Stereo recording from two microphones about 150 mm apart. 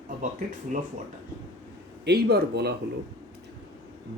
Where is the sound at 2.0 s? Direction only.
90° right.